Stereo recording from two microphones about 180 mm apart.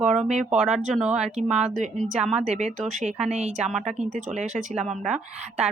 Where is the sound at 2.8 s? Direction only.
Centre (ahead or behind).